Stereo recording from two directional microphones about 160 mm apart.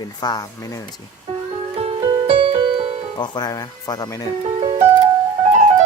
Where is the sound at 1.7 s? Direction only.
35° right (ahead or behind).